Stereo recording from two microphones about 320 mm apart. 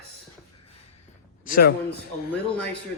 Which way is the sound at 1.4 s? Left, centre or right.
Left.